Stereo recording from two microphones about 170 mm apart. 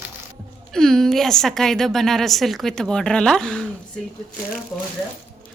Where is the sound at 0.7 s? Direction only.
Centre (ahead or behind).